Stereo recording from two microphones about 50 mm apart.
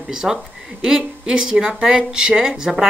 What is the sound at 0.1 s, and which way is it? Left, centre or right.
Speech, centre.